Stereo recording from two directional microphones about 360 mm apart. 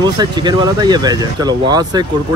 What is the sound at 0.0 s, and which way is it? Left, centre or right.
Speech, centre.